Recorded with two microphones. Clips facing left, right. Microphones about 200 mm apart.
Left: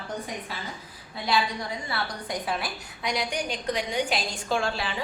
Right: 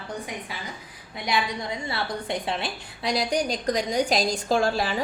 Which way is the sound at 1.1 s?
20° right (ahead or behind).